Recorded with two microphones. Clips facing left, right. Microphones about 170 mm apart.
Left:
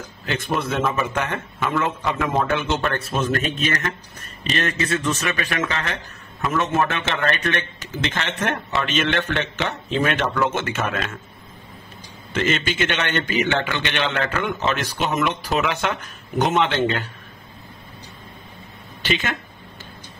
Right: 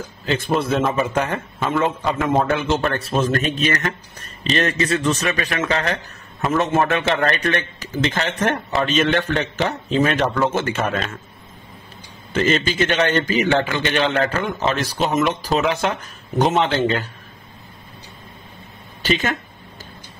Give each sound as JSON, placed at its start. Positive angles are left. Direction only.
{"t": 0.3, "sound": "a man's voice", "side_deg": -30}
{"t": 12.4, "sound": "speech", "side_deg": -35}